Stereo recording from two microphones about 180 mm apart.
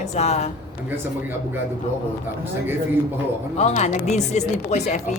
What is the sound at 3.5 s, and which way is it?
A woman's voice, 40° left (ahead or behind).